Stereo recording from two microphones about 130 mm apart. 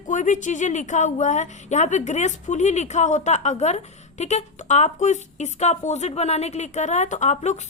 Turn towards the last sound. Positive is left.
turn(degrees=60)  # may be behind; listen again after turning